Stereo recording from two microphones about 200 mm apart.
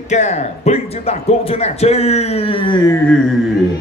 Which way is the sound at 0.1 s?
35° left (ahead or behind).